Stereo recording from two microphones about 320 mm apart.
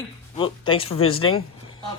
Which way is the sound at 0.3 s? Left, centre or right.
Centre.